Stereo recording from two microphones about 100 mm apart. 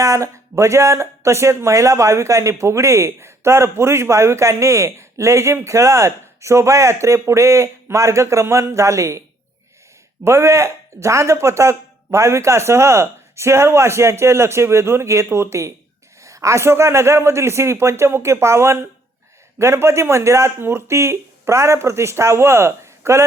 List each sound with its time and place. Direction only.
0.0 s speech: 30° right (ahead or behind)
10.2 s speech: 30° right (ahead or behind)